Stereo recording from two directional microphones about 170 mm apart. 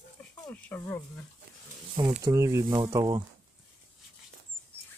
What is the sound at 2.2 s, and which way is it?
Speech, 20° right (ahead or behind).